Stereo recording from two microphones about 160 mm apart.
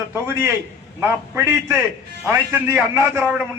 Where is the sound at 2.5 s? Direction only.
15° right (ahead or behind).